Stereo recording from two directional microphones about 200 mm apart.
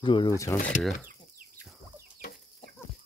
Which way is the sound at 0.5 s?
40° left (ahead or behind).